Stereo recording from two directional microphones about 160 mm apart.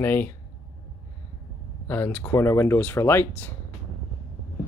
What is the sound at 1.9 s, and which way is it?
Speech, 10° left (ahead or behind).